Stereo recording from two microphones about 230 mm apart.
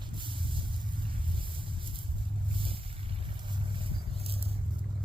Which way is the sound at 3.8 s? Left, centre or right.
Right.